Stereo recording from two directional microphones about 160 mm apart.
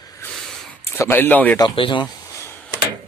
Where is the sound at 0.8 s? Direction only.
15° left (ahead or behind).